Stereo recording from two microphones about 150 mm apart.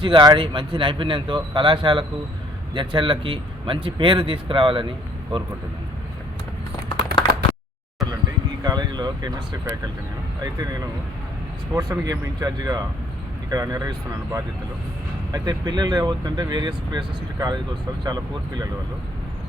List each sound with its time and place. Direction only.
0.0 s speech: 30° right (ahead or behind)
8.6 s speech: 30° right (ahead or behind)